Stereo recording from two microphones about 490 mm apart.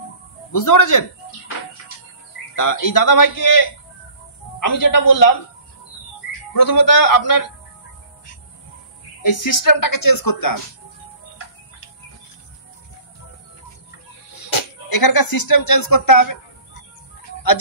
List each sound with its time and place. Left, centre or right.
0.5 s speech: left
2.5 s speech: left
6.5 s speech: left
9.2 s speech: left
15.0 s a woman's voice: left